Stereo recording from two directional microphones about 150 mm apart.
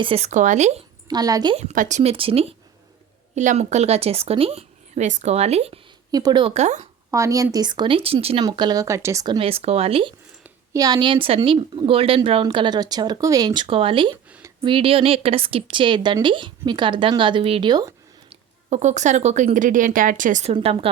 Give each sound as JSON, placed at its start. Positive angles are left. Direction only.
{"t": 0.0, "sound": "speech", "side_deg": -40}
{"t": 0.3, "sound": "a woman's voice", "side_deg": -55}
{"t": 1.0, "sound": "speech", "side_deg": -25}
{"t": 1.5, "sound": "a woman's voice", "side_deg": -50}
{"t": 3.3, "sound": "a woman's voice", "side_deg": -50}
{"t": 6.1, "sound": "speech", "side_deg": -25}
{"t": 6.5, "sound": "a woman's voice", "side_deg": -50}
{"t": 7.1, "sound": "speech", "side_deg": -20}
{"t": 8.4, "sound": "speech", "side_deg": -30}
{"t": 9.2, "sound": "speech", "side_deg": -35}
{"t": 10.8, "sound": "speech", "side_deg": -25}
{"t": 18.7, "sound": "speech", "side_deg": -50}
{"t": 20.5, "sound": "speech", "side_deg": -40}